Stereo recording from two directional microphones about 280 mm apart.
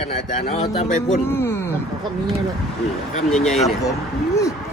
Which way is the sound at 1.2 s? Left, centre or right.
Centre.